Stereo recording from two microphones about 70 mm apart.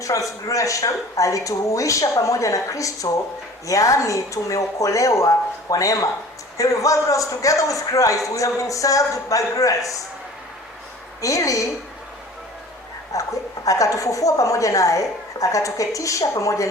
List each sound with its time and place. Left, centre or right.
0.0 s a woman's voice: left
11.2 s a woman's voice: left
13.1 s a woman's voice: left